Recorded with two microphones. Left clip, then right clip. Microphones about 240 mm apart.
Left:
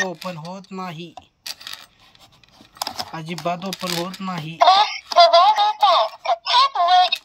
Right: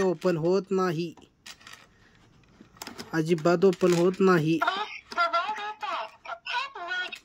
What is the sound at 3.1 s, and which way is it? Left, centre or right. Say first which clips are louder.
Speech: right 7 dB; right.